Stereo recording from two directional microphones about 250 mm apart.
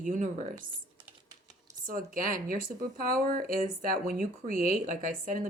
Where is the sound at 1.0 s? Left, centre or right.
Centre.